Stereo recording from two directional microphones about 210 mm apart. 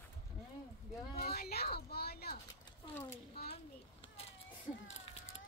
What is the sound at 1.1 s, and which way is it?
Speech, 45° left (ahead or behind).